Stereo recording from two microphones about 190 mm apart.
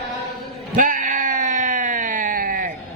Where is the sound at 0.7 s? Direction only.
45° right (ahead or behind).